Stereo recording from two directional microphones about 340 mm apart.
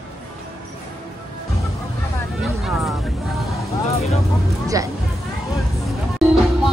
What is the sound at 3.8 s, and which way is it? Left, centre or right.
Vehicle, centre.